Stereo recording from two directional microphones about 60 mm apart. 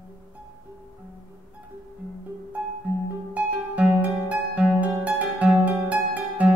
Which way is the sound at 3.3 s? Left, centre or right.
Right.